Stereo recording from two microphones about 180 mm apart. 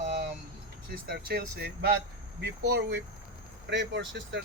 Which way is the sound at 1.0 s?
60° right (ahead or behind).